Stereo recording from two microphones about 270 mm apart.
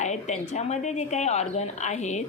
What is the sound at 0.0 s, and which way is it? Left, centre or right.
Speech, left.